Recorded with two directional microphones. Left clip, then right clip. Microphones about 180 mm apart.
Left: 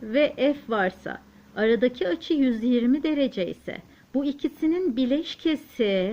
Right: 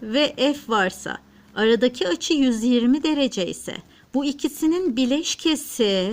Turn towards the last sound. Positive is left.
turn(degrees=-35)  # may be behind; listen again after turning